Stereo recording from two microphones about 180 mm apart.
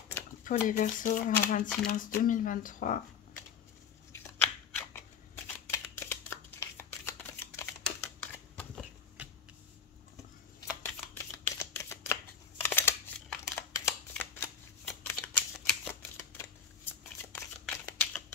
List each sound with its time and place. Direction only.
0.4 s speech: 45° left (ahead or behind)
4.1 s shuffling cards: 10° left (ahead or behind)
10.8 s shuffling cards: 15° left (ahead or behind)
13.8 s shuffling cards: 5° left (ahead or behind)